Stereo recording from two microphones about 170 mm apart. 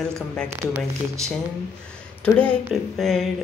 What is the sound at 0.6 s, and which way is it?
Speech, 15° right (ahead or behind).